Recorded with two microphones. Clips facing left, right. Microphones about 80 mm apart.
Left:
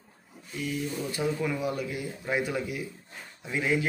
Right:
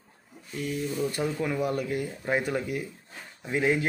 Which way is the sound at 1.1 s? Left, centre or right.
Right.